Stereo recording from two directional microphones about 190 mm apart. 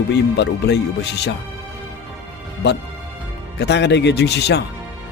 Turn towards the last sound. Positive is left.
turn(degrees=60)  # may be behind; listen again after turning